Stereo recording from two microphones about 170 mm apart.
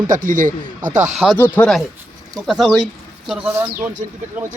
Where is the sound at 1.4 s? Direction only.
10° left (ahead or behind).